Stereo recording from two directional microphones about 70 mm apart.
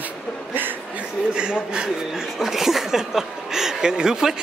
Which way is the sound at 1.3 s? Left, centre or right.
Centre.